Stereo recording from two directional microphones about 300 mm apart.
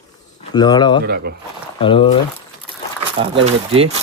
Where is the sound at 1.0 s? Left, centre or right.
Right.